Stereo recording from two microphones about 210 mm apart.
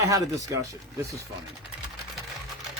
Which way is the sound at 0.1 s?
15° right (ahead or behind).